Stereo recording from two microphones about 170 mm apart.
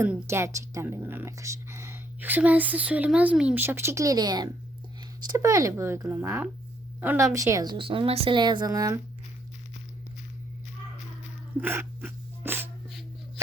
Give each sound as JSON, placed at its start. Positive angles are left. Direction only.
{"t": 0.0, "sound": "a woman's voice", "side_deg": -15}
{"t": 11.6, "sound": "dog", "side_deg": -10}